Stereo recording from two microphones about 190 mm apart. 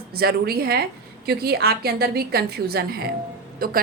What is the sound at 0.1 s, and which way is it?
A woman's voice, 55° right (ahead or behind).